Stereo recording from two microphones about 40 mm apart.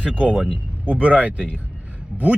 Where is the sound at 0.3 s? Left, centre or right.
Left.